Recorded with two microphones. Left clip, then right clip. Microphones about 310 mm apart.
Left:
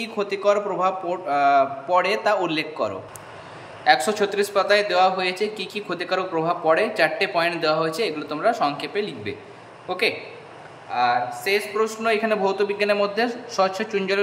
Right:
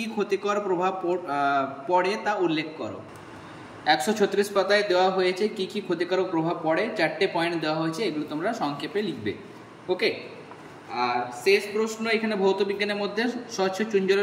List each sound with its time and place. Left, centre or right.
0.0 s a man's voice: centre
3.8 s a man's voice: centre
11.0 s a man's voice: centre